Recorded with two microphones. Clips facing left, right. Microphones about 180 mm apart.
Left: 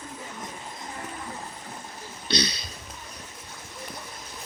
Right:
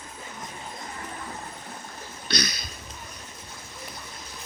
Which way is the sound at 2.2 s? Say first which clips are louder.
Left 3 dB; 30° left (ahead or behind).